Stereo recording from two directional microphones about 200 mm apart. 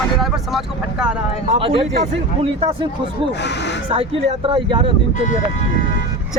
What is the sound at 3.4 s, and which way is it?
Speech, 60° left (ahead or behind).